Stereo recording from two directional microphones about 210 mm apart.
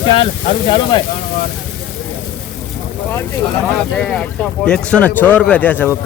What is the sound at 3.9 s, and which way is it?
A man's voice, 5° left (ahead or behind).